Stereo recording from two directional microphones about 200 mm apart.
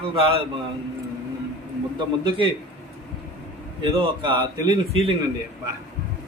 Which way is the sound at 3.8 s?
25° right (ahead or behind).